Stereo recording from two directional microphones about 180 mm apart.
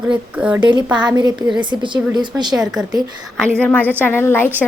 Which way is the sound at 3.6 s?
10° left (ahead or behind).